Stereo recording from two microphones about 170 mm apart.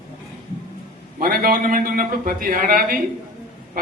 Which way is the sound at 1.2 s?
55° right (ahead or behind).